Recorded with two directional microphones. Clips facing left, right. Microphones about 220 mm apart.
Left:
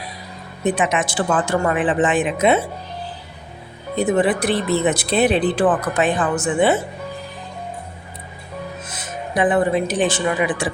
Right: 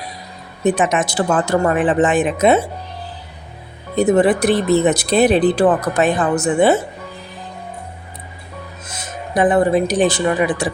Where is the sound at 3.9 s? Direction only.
45° right (ahead or behind).